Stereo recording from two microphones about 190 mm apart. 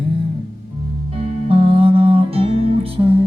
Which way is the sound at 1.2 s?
30° right (ahead or behind).